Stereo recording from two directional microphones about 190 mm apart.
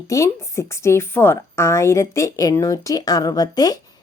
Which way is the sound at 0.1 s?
15° left (ahead or behind).